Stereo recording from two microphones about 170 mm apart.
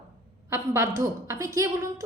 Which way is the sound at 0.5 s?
15° right (ahead or behind).